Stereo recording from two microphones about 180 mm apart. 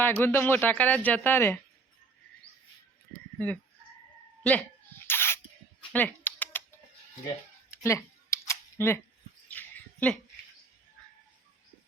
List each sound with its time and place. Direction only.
0.0 s speech: 10° left (ahead or behind)
3.3 s frog: 10° left (ahead or behind)
5.0 s spray: 15° left (ahead or behind)
5.9 s typing: 10° left (ahead or behind)
7.9 s camera: 15° left (ahead or behind)
9.5 s a sound: 10° left (ahead or behind)